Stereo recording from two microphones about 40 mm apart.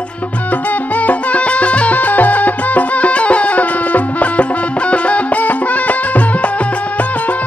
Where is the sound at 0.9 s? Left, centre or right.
Left.